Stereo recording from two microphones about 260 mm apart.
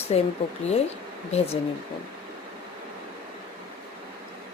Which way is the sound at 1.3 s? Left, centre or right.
Left.